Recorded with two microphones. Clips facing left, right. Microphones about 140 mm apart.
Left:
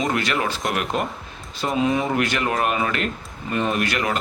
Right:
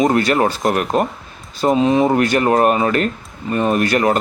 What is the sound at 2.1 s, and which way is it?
Speech, 40° right (ahead or behind).